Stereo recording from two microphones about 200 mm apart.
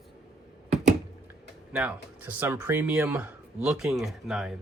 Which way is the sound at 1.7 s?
10° right (ahead or behind).